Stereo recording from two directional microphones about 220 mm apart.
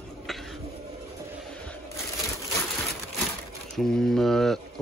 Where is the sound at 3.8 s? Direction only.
Centre (ahead or behind).